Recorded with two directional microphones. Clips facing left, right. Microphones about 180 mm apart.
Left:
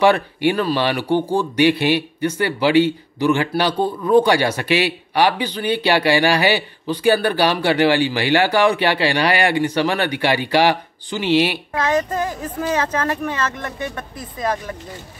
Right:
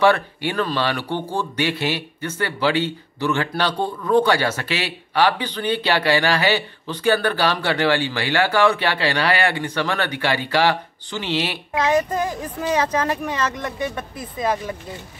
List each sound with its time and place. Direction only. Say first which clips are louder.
0.0 s speech: left 3 dB; 15° left (ahead or behind)
11.7 s speech: right 5 dB; 15° right (ahead or behind)